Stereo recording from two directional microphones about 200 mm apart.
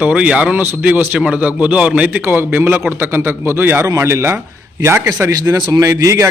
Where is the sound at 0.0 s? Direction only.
5° right (ahead or behind).